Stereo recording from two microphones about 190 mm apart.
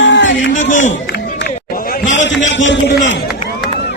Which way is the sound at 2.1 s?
75° left (ahead or behind).